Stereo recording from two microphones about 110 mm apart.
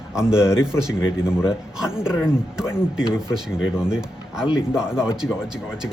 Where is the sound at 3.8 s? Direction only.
5° right (ahead or behind).